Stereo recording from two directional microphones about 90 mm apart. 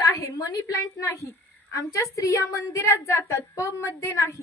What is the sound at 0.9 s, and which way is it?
A woman's voice, 35° left (ahead or behind).